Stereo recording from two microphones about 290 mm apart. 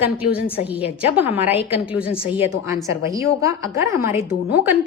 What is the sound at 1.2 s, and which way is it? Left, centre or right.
A woman's voice, centre.